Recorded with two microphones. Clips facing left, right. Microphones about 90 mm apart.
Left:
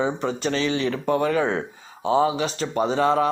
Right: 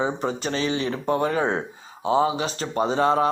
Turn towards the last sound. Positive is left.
turn(degrees=-35)  # may be behind; listen again after turning